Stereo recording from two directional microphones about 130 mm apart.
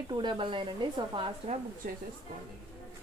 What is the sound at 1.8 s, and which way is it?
Speech, 90° right.